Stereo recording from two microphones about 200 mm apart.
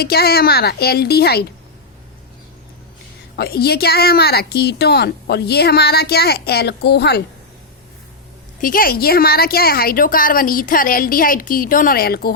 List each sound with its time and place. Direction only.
0.0 s speech: 50° left (ahead or behind)
3.3 s speech: 50° left (ahead or behind)
8.6 s speech: 45° left (ahead or behind)